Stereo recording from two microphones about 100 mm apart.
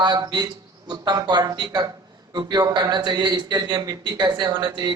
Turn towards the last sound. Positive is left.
turn(degrees=-45)  # may be behind; listen again after turning